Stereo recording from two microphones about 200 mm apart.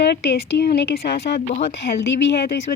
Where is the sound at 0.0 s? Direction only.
60° left (ahead or behind).